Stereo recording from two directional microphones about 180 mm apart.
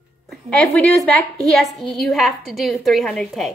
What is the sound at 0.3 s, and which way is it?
A woman's voice, 5° left (ahead or behind).